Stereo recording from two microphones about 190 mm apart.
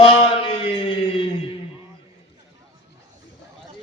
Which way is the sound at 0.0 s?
25° left (ahead or behind).